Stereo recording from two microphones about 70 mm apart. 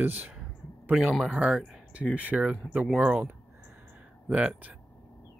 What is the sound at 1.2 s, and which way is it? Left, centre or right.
Speech, centre.